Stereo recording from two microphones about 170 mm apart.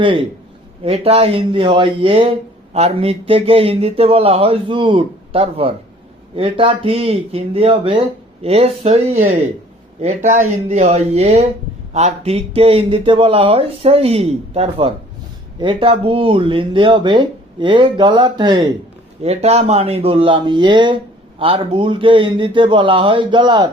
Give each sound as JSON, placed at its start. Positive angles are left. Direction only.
{"t": 0.0, "sound": "speech", "side_deg": -30}
{"t": 19.2, "sound": "speech", "side_deg": -40}